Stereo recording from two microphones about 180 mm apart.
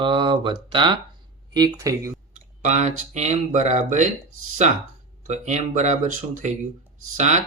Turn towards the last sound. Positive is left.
turn(degrees=-40)  # may be behind; listen again after turning